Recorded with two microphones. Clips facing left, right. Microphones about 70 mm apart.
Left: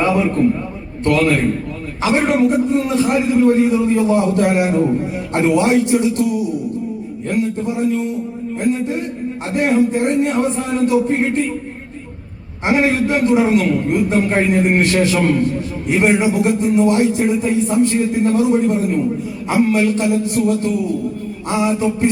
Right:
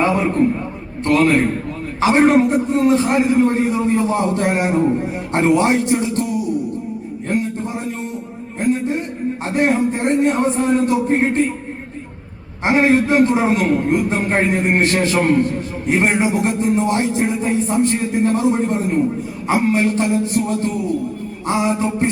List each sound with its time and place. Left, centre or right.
0.0 s a man's voice: right
7.3 s a man's voice: right
12.6 s a man's voice: right